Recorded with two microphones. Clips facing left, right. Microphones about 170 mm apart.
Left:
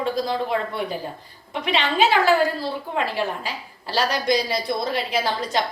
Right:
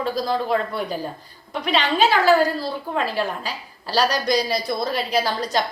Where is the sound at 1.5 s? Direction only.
20° left (ahead or behind).